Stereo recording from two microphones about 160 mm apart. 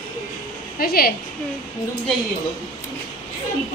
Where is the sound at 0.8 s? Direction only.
70° left (ahead or behind).